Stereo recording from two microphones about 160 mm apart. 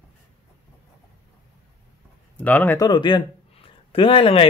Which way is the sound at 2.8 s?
30° left (ahead or behind).